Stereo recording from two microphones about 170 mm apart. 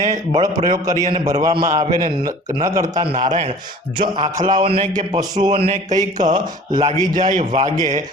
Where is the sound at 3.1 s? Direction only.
50° right (ahead or behind).